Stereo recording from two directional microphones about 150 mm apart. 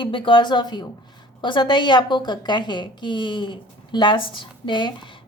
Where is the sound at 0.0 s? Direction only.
35° left (ahead or behind).